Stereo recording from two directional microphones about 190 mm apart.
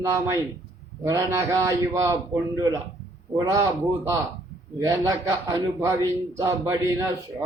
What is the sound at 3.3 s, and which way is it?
A man's voice, 15° right (ahead or behind).